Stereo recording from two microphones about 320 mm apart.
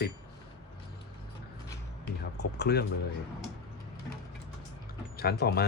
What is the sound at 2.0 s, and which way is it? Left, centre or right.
Speech, left.